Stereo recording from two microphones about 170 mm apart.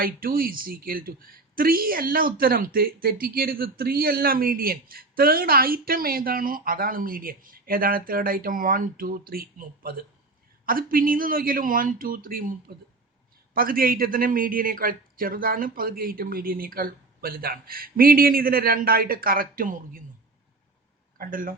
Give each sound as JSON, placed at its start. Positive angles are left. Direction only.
{"t": 0.0, "sound": "a woman's voice", "side_deg": -60}
{"t": 21.2, "sound": "speech", "side_deg": -55}